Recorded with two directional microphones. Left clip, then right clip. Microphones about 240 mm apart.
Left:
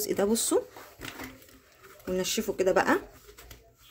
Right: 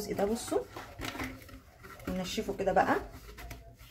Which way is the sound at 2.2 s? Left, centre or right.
Left.